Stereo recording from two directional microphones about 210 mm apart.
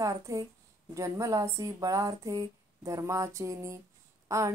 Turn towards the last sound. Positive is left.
turn(degrees=-15)  # may be behind; listen again after turning